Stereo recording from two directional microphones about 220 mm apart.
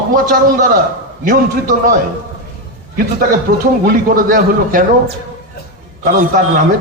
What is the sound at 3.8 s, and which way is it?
A man's voice, 40° right (ahead or behind).